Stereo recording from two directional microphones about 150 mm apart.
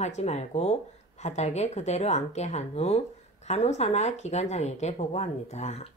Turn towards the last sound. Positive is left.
turn(degrees=45)  # may be behind; listen again after turning